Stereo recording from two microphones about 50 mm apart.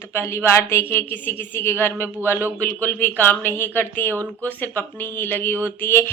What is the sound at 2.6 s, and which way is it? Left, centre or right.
Speech, left.